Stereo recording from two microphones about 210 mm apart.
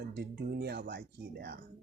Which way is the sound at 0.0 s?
50° right (ahead or behind).